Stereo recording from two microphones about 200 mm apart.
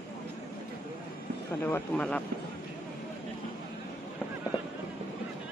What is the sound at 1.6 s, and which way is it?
Speech, 10° left (ahead or behind).